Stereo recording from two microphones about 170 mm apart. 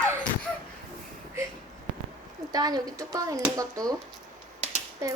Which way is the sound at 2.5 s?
20° right (ahead or behind).